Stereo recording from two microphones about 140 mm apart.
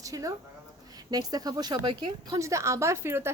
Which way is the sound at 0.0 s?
25° right (ahead or behind).